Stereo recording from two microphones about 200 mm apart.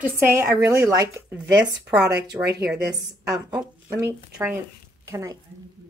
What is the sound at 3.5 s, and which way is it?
A woman's voice, 10° right (ahead or behind).